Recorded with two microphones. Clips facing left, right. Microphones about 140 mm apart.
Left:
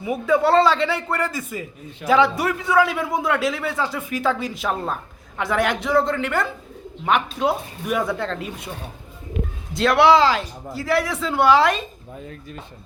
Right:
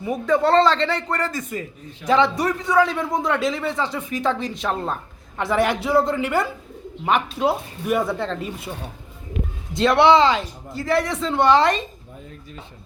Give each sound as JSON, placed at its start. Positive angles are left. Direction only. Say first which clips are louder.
{"t": 0.0, "sound": "a man's voice", "louder": "left 1 dB", "side_deg": 5}
{"t": 9.7, "sound": "a man's voice", "louder": "even", "side_deg": 0}